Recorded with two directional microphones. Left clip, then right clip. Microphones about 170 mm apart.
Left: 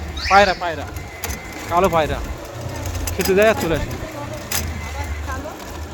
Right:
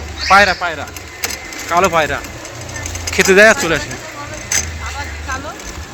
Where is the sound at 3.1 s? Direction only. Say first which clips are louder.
Right 7 dB; 15° right (ahead or behind).